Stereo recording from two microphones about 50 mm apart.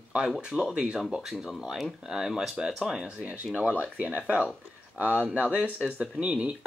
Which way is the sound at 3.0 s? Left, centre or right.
Right.